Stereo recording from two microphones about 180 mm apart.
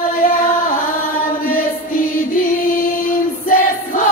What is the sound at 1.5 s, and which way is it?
Music, 50° left (ahead or behind).